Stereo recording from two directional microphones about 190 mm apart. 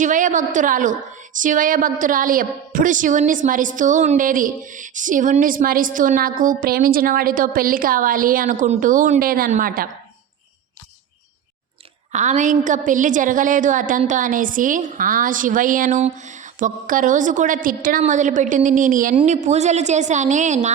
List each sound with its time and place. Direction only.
0.0 s a woman's voice: 40° right (ahead or behind)
12.1 s a woman's voice: 40° right (ahead or behind)